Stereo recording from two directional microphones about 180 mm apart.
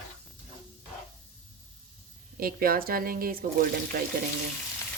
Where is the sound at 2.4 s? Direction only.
55° right (ahead or behind).